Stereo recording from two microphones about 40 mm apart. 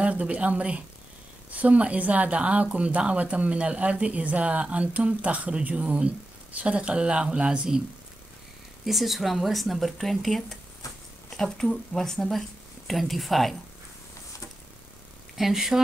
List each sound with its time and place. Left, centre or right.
0.0 s speech: right
8.8 s speech: centre
15.3 s speech: centre